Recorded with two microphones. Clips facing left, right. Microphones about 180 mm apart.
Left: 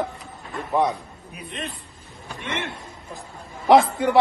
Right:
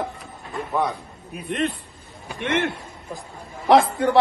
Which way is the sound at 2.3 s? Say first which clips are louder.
Right 7 dB; 65° right (ahead or behind).